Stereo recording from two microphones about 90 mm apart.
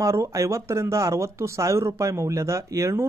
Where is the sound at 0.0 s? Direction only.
35° right (ahead or behind).